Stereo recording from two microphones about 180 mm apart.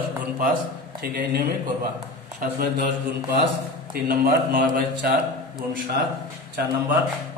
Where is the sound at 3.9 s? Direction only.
50° right (ahead or behind).